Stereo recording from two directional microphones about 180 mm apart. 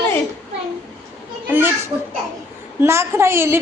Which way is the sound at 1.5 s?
10° right (ahead or behind).